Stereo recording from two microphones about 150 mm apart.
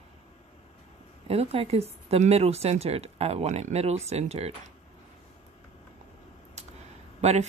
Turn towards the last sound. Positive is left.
turn(degrees=-45)  # may be behind; listen again after turning